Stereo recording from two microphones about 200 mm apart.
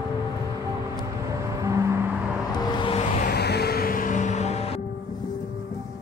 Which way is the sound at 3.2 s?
50° left (ahead or behind).